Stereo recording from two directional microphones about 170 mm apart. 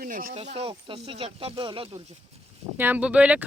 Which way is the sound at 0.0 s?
55° right (ahead or behind).